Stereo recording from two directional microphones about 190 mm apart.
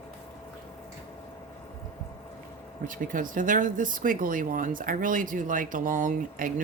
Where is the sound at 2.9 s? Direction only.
45° right (ahead or behind).